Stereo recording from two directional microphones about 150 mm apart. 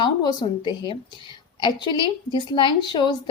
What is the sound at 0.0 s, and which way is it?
A woman's voice, 30° left (ahead or behind).